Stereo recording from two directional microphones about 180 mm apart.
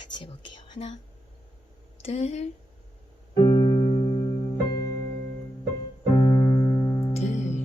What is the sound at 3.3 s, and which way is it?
Music, 25° left (ahead or behind).